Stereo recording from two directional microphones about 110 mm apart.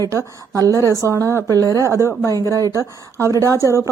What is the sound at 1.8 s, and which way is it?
Speech, 25° right (ahead or behind).